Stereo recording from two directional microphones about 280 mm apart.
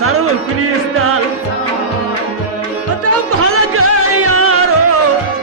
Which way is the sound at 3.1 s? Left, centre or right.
Right.